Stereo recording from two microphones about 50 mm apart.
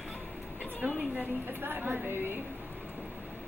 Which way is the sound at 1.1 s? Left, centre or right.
Right.